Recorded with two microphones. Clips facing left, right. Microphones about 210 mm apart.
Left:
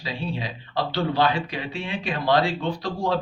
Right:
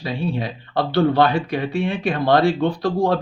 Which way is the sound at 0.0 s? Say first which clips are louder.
Right 6 dB; 55° right (ahead or behind).